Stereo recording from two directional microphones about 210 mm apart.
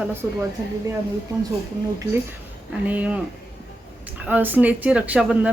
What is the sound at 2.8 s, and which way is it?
Speech, 5° right (ahead or behind).